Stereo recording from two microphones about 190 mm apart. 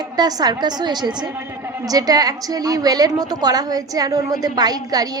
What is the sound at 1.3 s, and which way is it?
A woman's voice, 10° right (ahead or behind).